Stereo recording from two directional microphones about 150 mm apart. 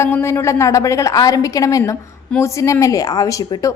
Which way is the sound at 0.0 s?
15° left (ahead or behind).